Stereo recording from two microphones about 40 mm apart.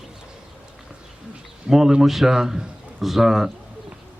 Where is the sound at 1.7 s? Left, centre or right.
Centre.